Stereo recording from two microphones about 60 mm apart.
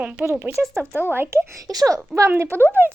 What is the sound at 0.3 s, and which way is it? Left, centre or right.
Speech, right.